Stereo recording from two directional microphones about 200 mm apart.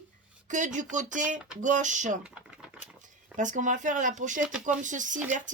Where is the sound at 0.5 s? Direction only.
40° right (ahead or behind).